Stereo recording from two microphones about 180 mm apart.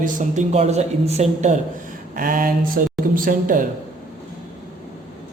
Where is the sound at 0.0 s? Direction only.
45° right (ahead or behind).